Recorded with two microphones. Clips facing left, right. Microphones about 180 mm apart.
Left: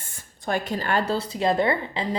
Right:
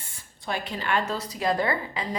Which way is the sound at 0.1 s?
45° left (ahead or behind).